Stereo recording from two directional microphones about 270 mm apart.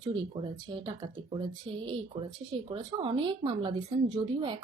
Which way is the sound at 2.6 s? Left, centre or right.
Centre.